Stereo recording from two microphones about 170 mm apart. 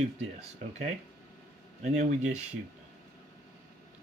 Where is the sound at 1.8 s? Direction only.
45° right (ahead or behind).